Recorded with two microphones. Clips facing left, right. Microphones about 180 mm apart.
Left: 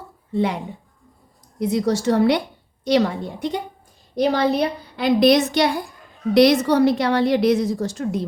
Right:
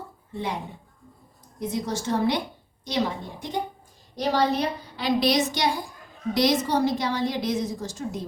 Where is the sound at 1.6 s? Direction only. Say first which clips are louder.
Left 8 dB; 75° left (ahead or behind).